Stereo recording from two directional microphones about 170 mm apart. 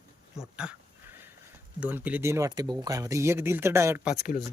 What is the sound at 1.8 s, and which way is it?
Speech, 10° right (ahead or behind).